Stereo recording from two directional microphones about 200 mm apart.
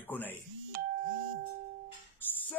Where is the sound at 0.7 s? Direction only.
50° right (ahead or behind).